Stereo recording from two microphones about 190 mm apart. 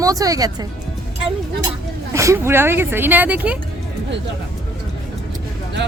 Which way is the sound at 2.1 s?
15° right (ahead or behind).